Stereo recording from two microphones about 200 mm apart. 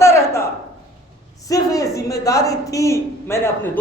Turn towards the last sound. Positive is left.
turn(degrees=10)  # may be behind; listen again after turning